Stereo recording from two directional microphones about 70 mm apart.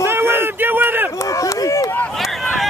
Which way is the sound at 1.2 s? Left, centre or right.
Left.